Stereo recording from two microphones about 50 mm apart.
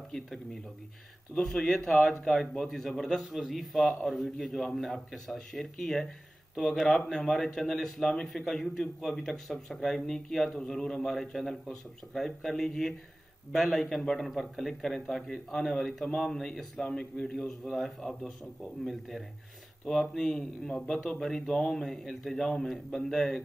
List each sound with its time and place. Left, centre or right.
1.3 s a man's voice: centre
3.3 s a man's voice: centre